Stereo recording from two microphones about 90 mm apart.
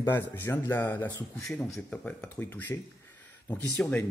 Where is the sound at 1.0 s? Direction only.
50° left (ahead or behind).